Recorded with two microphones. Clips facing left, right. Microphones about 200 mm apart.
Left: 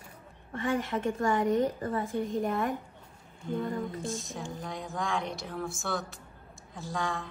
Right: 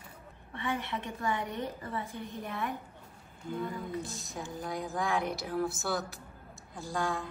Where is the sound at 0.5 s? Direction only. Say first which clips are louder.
Left 5 dB; 45° left (ahead or behind).